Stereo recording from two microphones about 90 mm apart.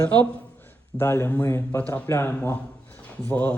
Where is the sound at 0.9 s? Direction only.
25° left (ahead or behind).